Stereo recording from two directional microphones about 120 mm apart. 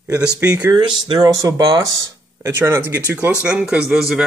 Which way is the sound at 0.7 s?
40° right (ahead or behind).